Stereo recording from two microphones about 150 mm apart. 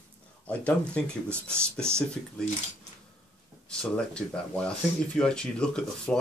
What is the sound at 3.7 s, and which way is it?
Speech, 5° left (ahead or behind).